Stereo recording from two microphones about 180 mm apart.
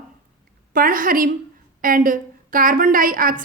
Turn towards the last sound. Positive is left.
turn(degrees=-50)  # may be behind; listen again after turning